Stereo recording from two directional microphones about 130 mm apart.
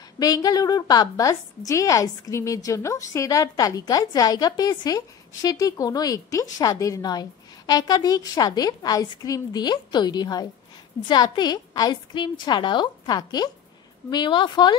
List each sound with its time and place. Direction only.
0.2 s a woman's voice: 30° left (ahead or behind)